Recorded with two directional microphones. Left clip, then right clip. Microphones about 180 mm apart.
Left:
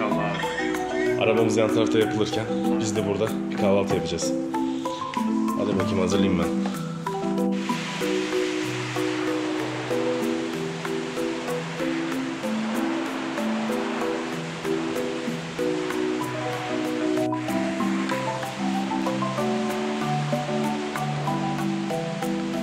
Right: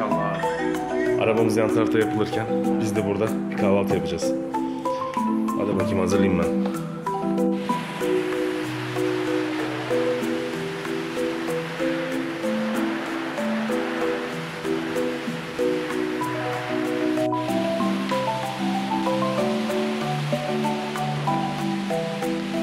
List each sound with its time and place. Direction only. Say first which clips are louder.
1.1 s speech: even; centre (ahead or behind)
6.0 s speech: right 3 dB; 20° right (ahead or behind)